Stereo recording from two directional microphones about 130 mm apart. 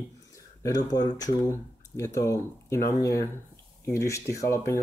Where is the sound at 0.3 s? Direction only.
25° left (ahead or behind).